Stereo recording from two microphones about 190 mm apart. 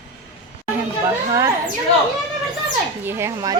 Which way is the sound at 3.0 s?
15° right (ahead or behind).